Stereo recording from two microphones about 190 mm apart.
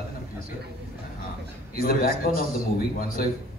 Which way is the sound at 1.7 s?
50° left (ahead or behind).